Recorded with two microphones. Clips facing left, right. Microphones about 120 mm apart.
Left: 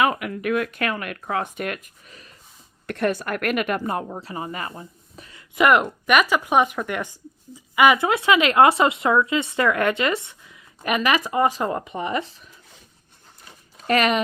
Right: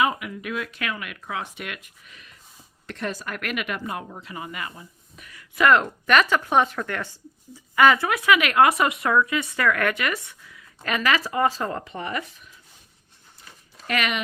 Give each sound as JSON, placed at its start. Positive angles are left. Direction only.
{"t": 0.0, "sound": "speech", "side_deg": 60}
{"t": 2.8, "sound": "speech", "side_deg": 55}
{"t": 13.8, "sound": "speech", "side_deg": 35}